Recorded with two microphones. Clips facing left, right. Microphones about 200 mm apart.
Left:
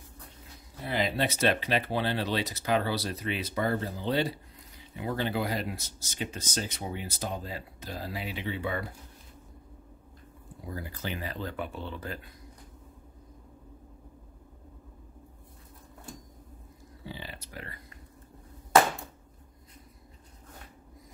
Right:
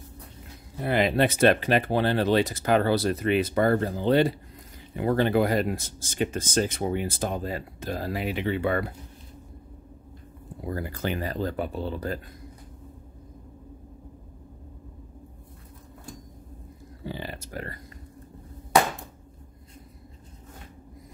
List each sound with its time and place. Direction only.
0.7 s speech: 60° right (ahead or behind)
10.7 s speech: 60° right (ahead or behind); by 12.2 s 40° right (ahead or behind)
17.0 s speech: 50° right (ahead or behind)